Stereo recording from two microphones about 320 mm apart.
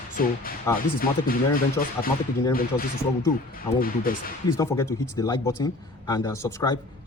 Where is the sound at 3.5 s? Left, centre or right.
Left.